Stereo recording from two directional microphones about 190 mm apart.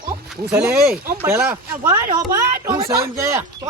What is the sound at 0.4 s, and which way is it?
Speech, 5° right (ahead or behind).